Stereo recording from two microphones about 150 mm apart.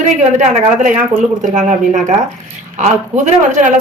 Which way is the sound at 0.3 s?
60° right (ahead or behind).